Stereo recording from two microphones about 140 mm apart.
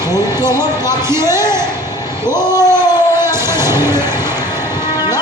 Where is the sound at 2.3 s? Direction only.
20° right (ahead or behind).